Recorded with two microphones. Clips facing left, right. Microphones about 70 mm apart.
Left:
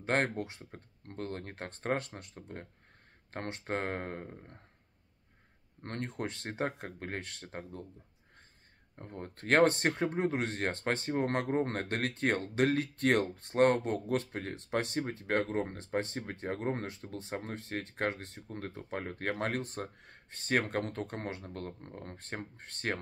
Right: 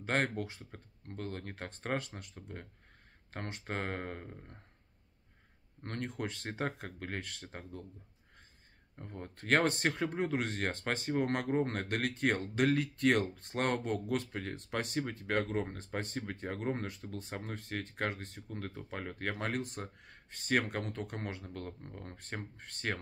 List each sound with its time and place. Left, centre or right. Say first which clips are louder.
0.0 s speech: left 2 dB; left
0.7 s speech: left 3 dB; left
5.8 s speech: left 1 dB; left
9.0 s speech: left 2 dB; left